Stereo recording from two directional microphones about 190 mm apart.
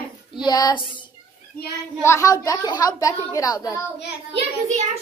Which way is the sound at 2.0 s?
15° left (ahead or behind).